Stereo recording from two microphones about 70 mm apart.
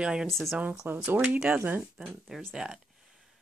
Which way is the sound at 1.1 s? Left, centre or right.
Right.